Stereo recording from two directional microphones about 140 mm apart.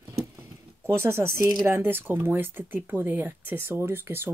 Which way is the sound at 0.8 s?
15° right (ahead or behind).